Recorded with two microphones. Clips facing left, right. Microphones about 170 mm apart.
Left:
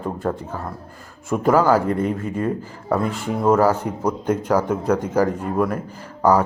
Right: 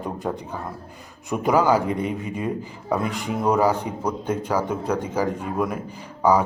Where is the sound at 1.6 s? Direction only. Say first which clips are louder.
Left 3 dB; 15° right (ahead or behind).